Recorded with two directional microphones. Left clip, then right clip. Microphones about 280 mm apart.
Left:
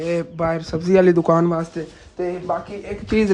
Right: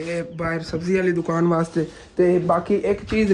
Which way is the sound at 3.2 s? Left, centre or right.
Left.